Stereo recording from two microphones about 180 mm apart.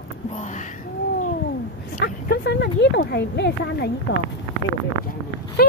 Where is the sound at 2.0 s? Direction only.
65° left (ahead or behind).